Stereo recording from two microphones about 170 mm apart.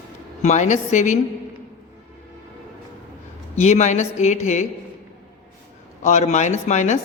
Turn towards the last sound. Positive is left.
turn(degrees=45)  # may be behind; listen again after turning